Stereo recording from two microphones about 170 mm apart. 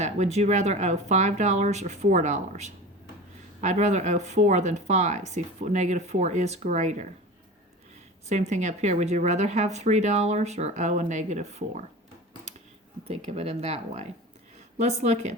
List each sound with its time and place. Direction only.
0.0 s speech: 40° right (ahead or behind)
8.3 s speech: 45° right (ahead or behind)
13.1 s speech: 40° right (ahead or behind)